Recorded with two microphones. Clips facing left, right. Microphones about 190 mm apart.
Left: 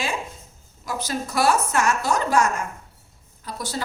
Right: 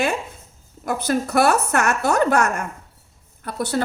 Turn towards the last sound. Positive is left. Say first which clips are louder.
# right 7 dB
turn(degrees=-60)  # may be behind; listen again after turning